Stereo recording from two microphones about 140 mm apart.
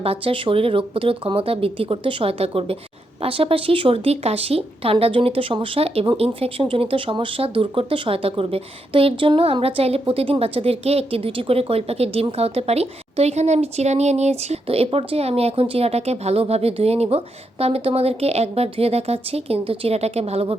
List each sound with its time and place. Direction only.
0.0 s speech: 45° right (ahead or behind)